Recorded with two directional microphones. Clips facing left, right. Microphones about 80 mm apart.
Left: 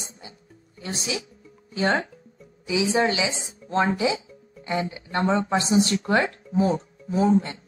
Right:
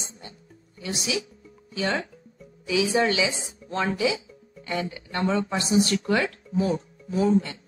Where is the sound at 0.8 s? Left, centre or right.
Left.